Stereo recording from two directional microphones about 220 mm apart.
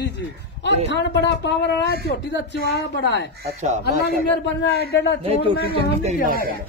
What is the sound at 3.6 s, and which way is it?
Speech, 30° right (ahead or behind).